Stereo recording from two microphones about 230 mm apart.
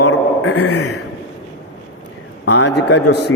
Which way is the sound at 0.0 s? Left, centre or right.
Left.